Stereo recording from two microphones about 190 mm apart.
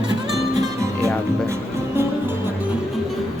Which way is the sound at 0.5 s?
15° right (ahead or behind).